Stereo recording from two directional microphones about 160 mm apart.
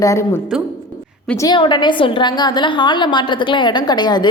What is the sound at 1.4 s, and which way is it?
A woman's voice, 30° left (ahead or behind).